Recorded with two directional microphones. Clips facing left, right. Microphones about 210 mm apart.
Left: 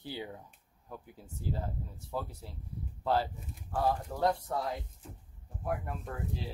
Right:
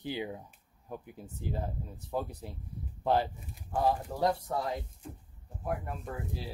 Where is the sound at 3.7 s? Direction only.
10° right (ahead or behind).